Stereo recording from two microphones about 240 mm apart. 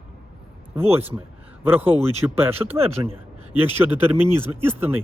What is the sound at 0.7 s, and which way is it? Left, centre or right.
A man's voice, centre.